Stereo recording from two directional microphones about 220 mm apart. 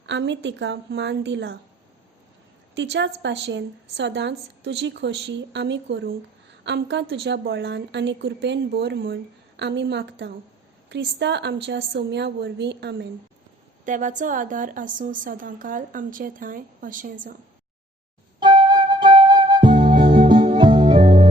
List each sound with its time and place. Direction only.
0.0 s a woman's voice: 55° right (ahead or behind)
2.7 s a woman's voice: 55° right (ahead or behind)
13.8 s a woman's voice: 35° right (ahead or behind)
18.3 s music: 20° right (ahead or behind)